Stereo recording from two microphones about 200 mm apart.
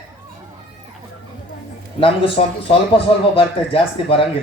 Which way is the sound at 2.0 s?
25° left (ahead or behind).